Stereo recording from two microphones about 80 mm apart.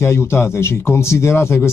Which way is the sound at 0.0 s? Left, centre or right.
Left.